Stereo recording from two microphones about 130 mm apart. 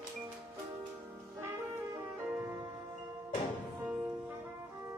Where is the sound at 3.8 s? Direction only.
10° right (ahead or behind).